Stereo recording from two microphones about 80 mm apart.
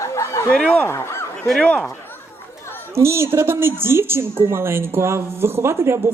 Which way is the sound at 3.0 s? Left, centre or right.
Right.